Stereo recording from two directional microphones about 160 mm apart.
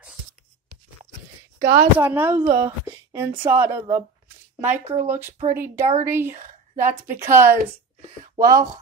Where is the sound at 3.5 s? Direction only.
15° right (ahead or behind).